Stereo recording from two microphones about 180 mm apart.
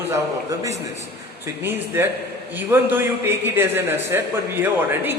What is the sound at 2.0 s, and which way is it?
A man's voice, 10° right (ahead or behind).